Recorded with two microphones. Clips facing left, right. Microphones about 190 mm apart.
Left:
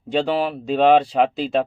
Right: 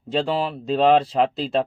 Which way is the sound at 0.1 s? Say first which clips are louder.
Left 2 dB; centre (ahead or behind).